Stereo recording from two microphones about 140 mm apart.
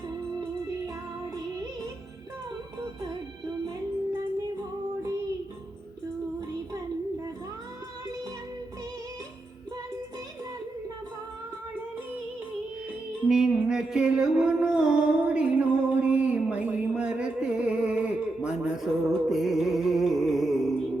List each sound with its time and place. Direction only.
13.2 s music: 5° right (ahead or behind)